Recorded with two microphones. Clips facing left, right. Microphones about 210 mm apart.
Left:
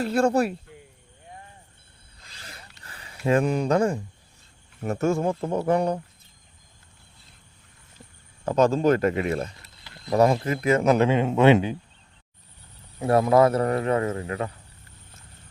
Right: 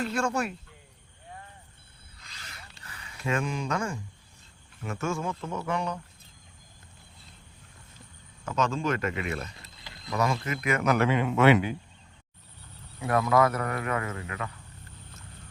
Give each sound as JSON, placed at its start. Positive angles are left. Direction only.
{"t": 0.0, "sound": "speech", "side_deg": 35}
{"t": 2.8, "sound": "speech", "side_deg": 30}
{"t": 8.4, "sound": "speech", "side_deg": 35}
{"t": 13.0, "sound": "speech", "side_deg": 30}